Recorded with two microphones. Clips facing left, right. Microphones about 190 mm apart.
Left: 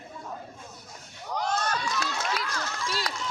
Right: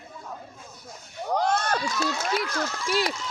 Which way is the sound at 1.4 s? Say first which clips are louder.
Right 3 dB; 55° right (ahead or behind).